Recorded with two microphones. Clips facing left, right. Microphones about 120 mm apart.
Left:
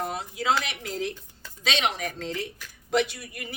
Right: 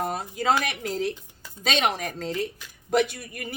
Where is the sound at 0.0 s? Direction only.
45° right (ahead or behind).